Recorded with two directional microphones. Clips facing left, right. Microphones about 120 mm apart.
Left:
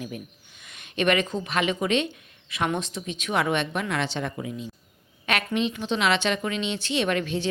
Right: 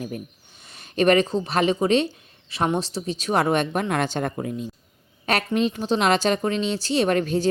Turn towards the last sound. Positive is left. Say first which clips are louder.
# right 5 dB
turn(degrees=-40)  # may be behind; listen again after turning